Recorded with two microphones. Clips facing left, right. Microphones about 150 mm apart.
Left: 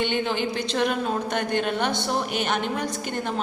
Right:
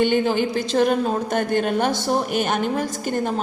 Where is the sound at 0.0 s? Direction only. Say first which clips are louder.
Right 6 dB; 45° right (ahead or behind).